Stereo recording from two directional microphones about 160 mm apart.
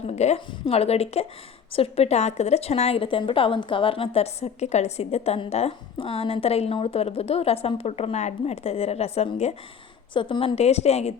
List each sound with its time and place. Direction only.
0.1 s a woman's voice: 45° left (ahead or behind)